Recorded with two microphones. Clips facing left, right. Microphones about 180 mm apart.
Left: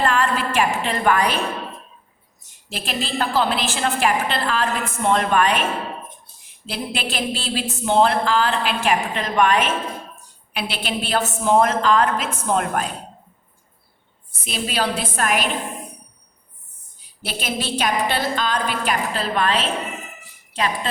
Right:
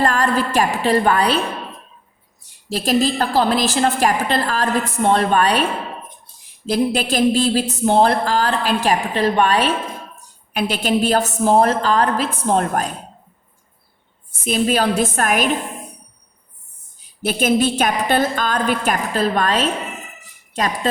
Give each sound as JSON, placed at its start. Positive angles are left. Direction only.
{"t": 0.0, "sound": "a woman's voice", "side_deg": -40}
{"t": 2.6, "sound": "a woman's voice", "side_deg": -40}
{"t": 6.7, "sound": "a woman's voice", "side_deg": -40}
{"t": 10.5, "sound": "a woman's voice", "side_deg": -45}
{"t": 14.4, "sound": "a woman's voice", "side_deg": -45}
{"t": 17.2, "sound": "a woman's voice", "side_deg": -50}